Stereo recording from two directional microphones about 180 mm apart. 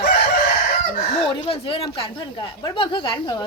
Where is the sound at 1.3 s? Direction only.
30° left (ahead or behind).